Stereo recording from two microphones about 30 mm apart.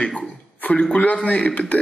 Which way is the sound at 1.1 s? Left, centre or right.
Left.